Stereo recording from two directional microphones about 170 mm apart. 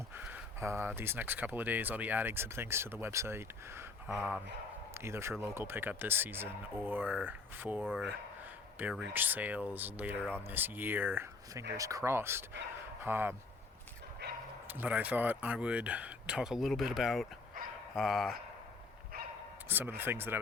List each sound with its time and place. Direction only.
0.2 s speech: 15° right (ahead or behind)
14.2 s bow-wow: 80° right
14.7 s speech: 10° right (ahead or behind)
19.6 s speech: 10° right (ahead or behind)